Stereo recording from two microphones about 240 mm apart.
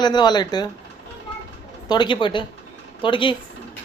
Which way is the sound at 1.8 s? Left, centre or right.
Centre.